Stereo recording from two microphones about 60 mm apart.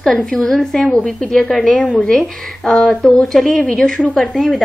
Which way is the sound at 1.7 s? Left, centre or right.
Left.